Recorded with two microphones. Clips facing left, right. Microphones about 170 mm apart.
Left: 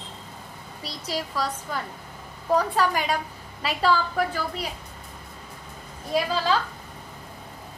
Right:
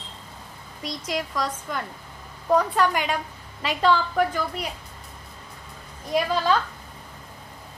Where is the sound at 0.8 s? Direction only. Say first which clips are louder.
Right 2 dB; 35° left (ahead or behind).